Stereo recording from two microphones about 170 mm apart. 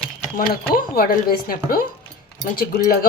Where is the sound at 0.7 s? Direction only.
60° left (ahead or behind).